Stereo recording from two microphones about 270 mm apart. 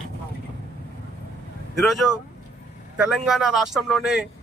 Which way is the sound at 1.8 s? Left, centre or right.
Centre.